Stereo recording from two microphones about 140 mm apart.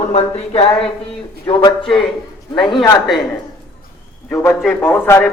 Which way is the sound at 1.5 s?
25° left (ahead or behind).